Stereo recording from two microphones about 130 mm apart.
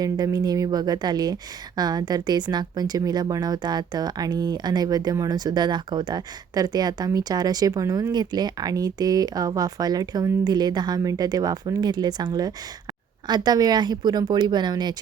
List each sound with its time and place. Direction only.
0.0 s speech: 30° right (ahead or behind)